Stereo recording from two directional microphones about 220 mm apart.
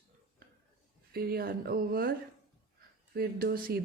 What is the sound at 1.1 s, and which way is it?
Speech, 45° right (ahead or behind).